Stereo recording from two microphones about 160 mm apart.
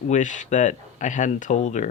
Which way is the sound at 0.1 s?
50° left (ahead or behind).